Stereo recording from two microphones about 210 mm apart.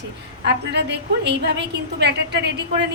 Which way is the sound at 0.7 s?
55° right (ahead or behind).